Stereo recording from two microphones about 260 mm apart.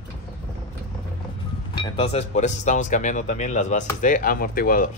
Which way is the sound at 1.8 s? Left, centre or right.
Left.